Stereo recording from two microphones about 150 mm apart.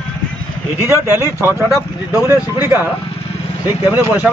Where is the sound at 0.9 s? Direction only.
15° right (ahead or behind).